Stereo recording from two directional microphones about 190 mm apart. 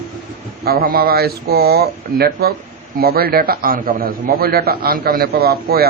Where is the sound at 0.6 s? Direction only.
55° right (ahead or behind).